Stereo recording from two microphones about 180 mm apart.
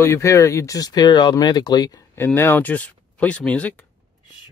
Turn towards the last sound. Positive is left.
turn(degrees=5)  # may be behind; listen again after turning